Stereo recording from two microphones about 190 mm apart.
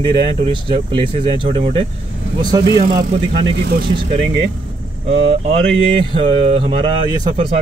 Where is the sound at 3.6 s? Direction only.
60° right (ahead or behind).